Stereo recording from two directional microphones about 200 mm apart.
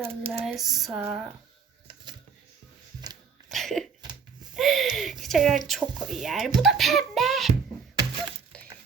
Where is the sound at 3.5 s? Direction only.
Centre (ahead or behind).